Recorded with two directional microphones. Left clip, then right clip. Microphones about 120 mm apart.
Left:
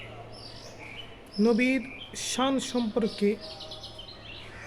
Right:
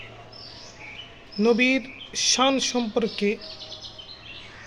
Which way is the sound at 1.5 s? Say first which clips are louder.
Right 5 dB; 20° left (ahead or behind).